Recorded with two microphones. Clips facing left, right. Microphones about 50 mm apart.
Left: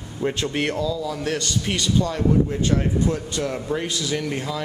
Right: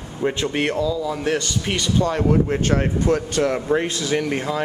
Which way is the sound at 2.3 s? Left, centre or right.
Right.